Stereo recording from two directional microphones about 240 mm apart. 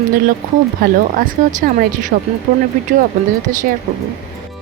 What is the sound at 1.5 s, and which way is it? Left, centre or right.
Speech, right.